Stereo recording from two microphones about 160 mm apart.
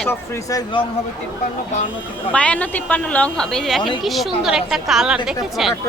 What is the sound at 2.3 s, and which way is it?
A woman's voice, 10° left (ahead or behind).